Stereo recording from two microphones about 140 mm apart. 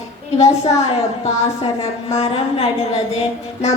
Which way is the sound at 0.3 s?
50° left (ahead or behind).